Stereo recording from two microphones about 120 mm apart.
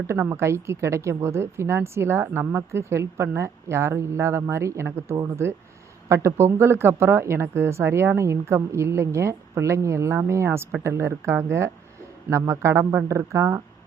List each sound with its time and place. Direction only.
0.1 s a woman's voice: 20° right (ahead or behind)